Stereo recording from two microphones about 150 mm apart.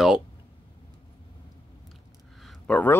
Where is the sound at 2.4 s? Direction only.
5° left (ahead or behind).